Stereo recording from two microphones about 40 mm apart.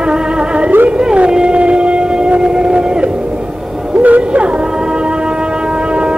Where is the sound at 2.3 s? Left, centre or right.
Right.